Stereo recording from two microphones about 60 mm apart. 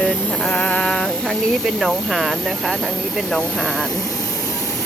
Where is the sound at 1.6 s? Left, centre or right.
Centre.